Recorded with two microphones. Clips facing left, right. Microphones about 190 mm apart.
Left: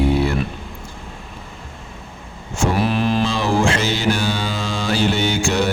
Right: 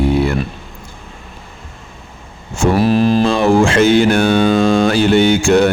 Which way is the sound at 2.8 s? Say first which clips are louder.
Right 8 dB; 40° right (ahead or behind).